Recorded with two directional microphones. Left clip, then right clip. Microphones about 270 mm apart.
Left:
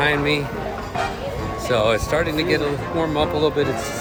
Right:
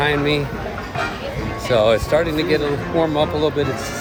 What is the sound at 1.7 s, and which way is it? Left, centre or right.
Speech, centre.